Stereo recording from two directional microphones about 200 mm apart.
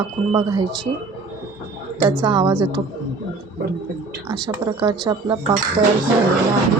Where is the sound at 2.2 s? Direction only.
20° right (ahead or behind).